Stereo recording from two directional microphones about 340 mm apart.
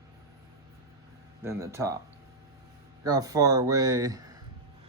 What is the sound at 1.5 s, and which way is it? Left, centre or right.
Speech, centre.